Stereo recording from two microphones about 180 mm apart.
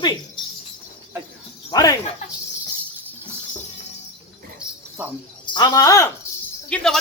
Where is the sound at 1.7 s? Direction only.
20° left (ahead or behind).